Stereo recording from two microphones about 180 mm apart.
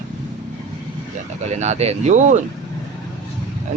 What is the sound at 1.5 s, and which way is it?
Speech, 40° right (ahead or behind).